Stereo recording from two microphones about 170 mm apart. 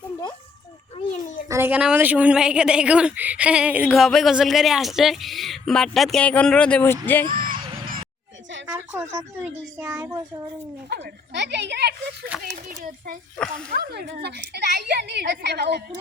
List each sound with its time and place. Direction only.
1.5 s a woman's voice: 15° right (ahead or behind); by 7.3 s 10° left (ahead or behind)
7.3 s music: 55° right (ahead or behind)
8.6 s a sound: 10° right (ahead or behind)
10.0 s a child's voice: 25° right (ahead or behind)
10.8 s speech: 80° right
12.4 s a child's voice: 50° right (ahead or behind)
13.7 s a woman's voice: 70° right (ahead or behind)